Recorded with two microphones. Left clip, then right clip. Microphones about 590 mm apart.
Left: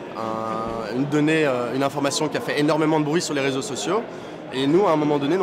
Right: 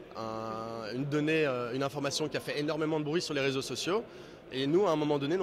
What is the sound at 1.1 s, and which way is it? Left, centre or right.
Speech, right.